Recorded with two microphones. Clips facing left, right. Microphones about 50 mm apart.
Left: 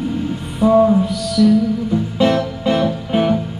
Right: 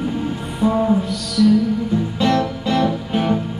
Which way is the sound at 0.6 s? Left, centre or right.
Centre.